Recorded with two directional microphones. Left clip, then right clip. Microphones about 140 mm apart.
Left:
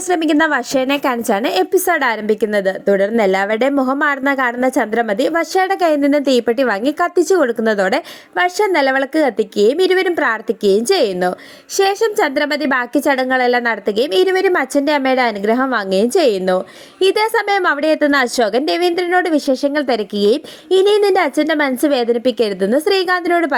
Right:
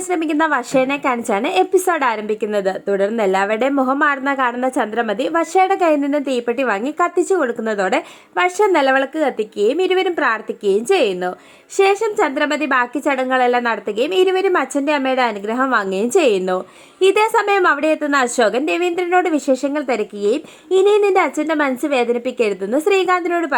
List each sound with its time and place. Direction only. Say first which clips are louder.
0.1 s a woman's voice: left 3 dB; 25° left (ahead or behind)
9.1 s speech: left 4 dB; 45° left (ahead or behind)
9.6 s a woman's voice: left 3 dB; 20° left (ahead or behind)
20.7 s a woman's voice: left 1 dB; 15° left (ahead or behind)